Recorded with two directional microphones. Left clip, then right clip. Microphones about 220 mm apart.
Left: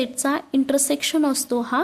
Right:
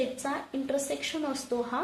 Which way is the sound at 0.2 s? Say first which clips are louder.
Left 11 dB; 45° left (ahead or behind).